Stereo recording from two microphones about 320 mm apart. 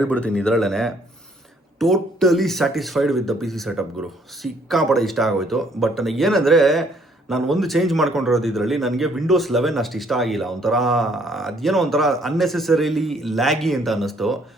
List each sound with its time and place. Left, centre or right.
0.0 s a man's voice: centre